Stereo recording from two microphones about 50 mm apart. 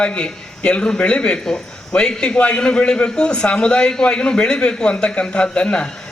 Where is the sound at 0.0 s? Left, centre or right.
Left.